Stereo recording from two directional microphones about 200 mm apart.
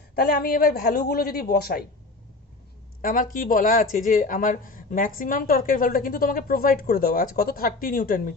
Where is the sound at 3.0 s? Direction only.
45° left (ahead or behind).